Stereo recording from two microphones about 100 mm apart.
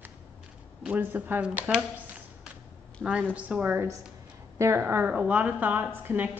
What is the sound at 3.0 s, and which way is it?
Speech, 15° right (ahead or behind).